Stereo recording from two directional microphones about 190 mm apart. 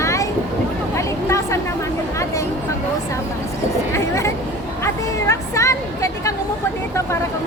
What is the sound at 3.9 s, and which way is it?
Vehicle, 15° left (ahead or behind).